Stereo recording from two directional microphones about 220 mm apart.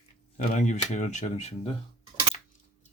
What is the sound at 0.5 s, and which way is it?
Speech, 35° left (ahead or behind).